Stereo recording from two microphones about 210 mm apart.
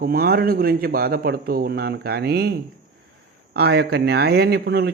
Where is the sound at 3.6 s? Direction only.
50° right (ahead or behind).